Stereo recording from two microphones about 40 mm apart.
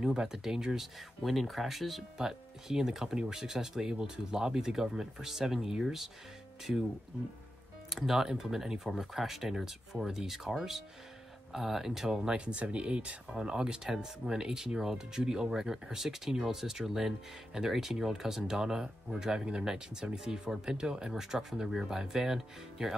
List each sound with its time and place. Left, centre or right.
0.0 s speech: centre
1.2 s speech: centre
2.1 s speech: centre
7.9 s speech: centre
12.3 s speech: right; by 22.9 s centre